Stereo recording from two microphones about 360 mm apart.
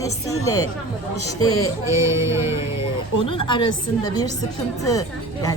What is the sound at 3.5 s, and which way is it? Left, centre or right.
A woman's voice, centre.